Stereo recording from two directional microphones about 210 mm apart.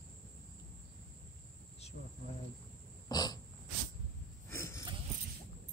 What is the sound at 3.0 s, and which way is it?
Wild animals, 20° left (ahead or behind).